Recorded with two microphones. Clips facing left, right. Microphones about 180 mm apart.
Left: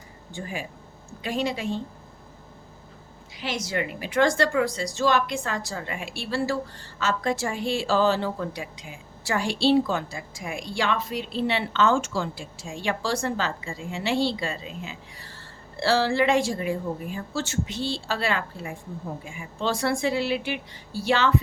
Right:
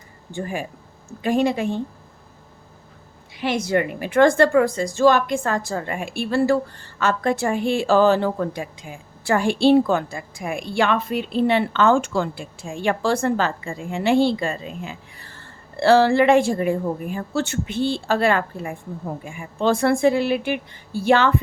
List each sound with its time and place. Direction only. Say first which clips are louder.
0.3 s a woman's voice: right 6 dB; 50° right (ahead or behind)
3.3 s a woman's voice: right 8 dB; 55° right (ahead or behind)